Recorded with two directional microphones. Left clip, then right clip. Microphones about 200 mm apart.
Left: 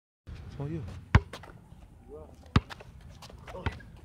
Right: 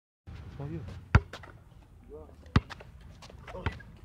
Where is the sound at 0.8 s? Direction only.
5° left (ahead or behind).